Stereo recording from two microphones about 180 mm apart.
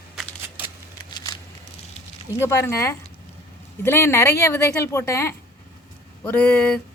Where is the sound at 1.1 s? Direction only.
25° left (ahead or behind).